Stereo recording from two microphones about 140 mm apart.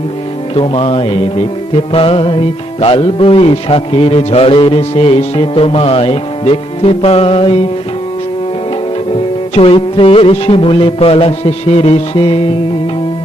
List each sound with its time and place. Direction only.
0.5 s a man's voice: 40° left (ahead or behind)
9.6 s a man's voice: 40° left (ahead or behind)